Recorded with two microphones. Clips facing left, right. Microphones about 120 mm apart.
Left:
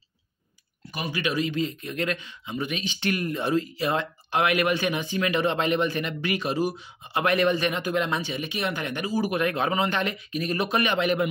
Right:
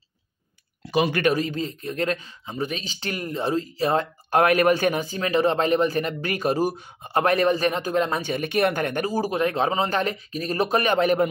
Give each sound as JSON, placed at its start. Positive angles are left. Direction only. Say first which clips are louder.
{"t": 0.8, "sound": "speech", "louder": "right 10 dB", "side_deg": -85}
{"t": 1.2, "sound": "speech", "louder": "right 3 dB", "side_deg": -40}
{"t": 9.3, "sound": "speech", "louder": "right 2 dB", "side_deg": -30}